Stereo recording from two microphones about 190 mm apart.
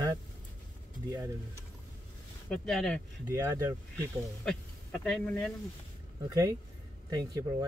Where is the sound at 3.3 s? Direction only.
15° right (ahead or behind).